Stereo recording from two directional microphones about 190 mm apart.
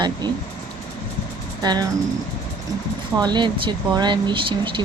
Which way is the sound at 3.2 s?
25° right (ahead or behind).